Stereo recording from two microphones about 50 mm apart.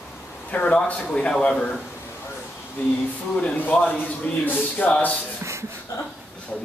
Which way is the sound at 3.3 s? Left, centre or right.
Left.